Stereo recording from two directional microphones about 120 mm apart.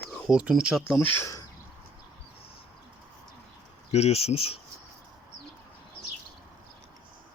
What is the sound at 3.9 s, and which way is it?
Speech, 60° left (ahead or behind).